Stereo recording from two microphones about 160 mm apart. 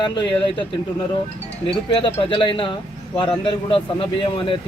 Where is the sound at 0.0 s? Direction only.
30° left (ahead or behind).